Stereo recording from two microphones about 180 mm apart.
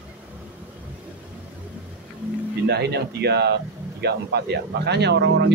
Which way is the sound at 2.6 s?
65° right (ahead or behind).